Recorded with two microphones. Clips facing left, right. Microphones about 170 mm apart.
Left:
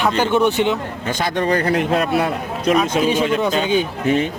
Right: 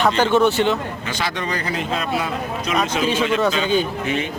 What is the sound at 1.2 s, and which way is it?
Speech, 50° left (ahead or behind).